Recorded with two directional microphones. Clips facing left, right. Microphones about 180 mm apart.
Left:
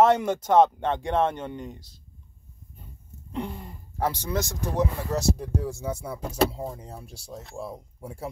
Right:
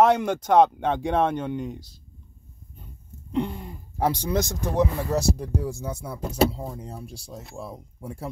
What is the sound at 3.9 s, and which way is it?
Speech, 15° right (ahead or behind).